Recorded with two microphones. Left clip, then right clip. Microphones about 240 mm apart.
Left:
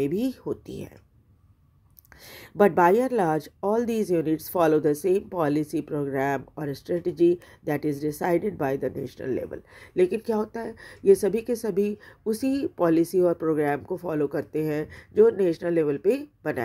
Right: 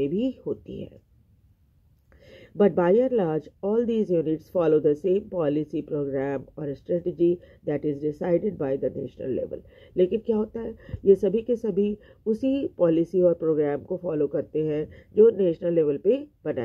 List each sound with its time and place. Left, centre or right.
0.0 s speech: left
2.5 s speech: left